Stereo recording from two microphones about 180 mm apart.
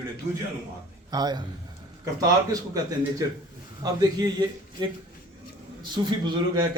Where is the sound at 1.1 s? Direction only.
20° right (ahead or behind).